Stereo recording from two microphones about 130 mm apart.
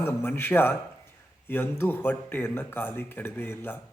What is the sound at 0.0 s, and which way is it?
A man's voice, 15° left (ahead or behind).